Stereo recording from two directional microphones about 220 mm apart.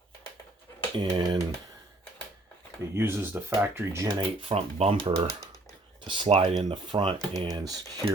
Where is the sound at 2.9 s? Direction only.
10° right (ahead or behind).